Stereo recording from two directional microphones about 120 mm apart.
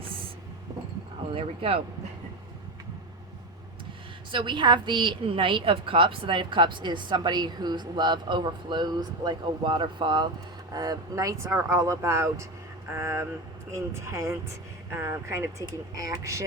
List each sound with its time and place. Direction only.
1.3 s speech: 50° right (ahead or behind)
4.3 s a woman's voice: 40° right (ahead or behind)